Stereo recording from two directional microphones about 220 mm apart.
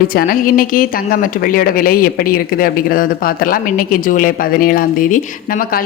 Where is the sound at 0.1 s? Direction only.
40° left (ahead or behind).